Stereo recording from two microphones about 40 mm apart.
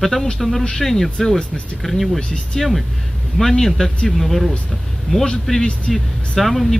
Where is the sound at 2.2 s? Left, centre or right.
Left.